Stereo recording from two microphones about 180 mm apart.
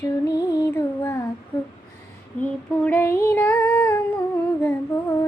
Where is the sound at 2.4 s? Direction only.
10° left (ahead or behind).